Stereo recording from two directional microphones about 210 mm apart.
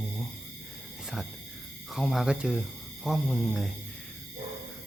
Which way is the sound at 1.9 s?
Centre (ahead or behind).